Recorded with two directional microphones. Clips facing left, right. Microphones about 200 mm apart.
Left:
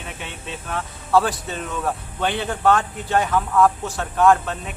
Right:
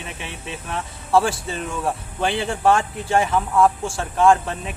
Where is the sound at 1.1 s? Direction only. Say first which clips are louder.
Even; 25° right (ahead or behind).